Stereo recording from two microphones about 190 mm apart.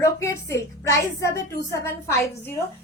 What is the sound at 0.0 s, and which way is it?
A woman's voice, 15° left (ahead or behind).